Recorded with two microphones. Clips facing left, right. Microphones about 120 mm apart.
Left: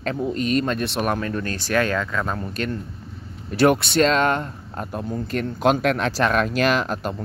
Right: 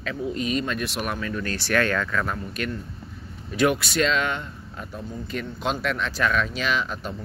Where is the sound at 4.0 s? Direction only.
40° left (ahead or behind).